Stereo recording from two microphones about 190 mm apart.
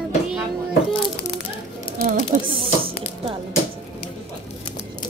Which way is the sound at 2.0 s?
40° right (ahead or behind).